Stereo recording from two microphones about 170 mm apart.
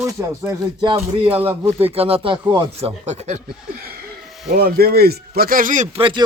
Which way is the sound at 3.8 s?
65° right (ahead or behind).